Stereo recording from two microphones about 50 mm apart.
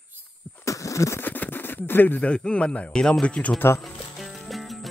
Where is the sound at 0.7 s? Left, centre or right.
Left.